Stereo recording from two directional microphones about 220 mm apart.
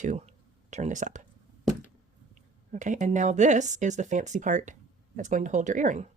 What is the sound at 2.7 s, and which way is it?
Speech, 35° right (ahead or behind).